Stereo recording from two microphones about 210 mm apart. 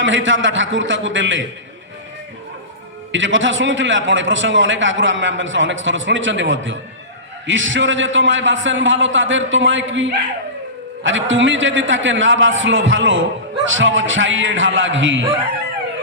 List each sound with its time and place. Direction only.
0.0 s a man's voice: 65° right (ahead or behind)
3.1 s a man's voice: 60° right (ahead or behind)